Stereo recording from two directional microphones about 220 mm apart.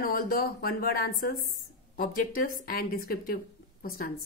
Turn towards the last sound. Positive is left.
turn(degrees=40)  # may be behind; listen again after turning